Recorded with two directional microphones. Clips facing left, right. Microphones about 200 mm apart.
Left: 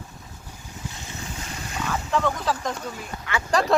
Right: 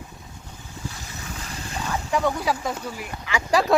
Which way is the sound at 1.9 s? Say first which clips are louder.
Right 1 dB; 10° right (ahead or behind).